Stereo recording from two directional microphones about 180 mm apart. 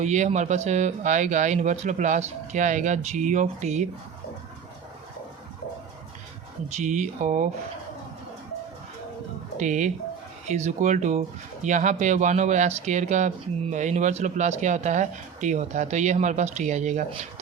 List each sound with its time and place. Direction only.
0.0 s speech: 40° right (ahead or behind)
6.7 s speech: 40° right (ahead or behind)
9.6 s speech: 45° right (ahead or behind)